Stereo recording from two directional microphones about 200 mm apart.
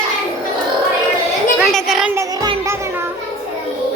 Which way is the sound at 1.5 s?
Centre (ahead or behind).